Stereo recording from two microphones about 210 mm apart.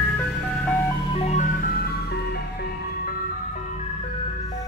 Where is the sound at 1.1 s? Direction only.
30° left (ahead or behind); by 3.1 s 50° left (ahead or behind).